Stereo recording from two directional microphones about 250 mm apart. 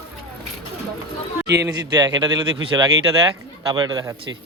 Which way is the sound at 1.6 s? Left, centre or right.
Centre.